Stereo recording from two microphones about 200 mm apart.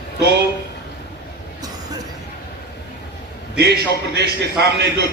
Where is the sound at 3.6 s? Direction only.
55° right (ahead or behind).